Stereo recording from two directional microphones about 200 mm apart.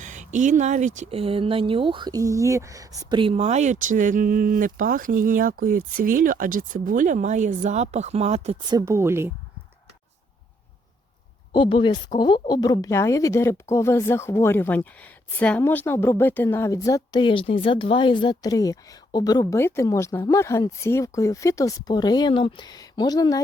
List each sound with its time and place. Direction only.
0.0 s speech: 40° right (ahead or behind); by 9.3 s 10° right (ahead or behind)
11.5 s speech: 25° left (ahead or behind)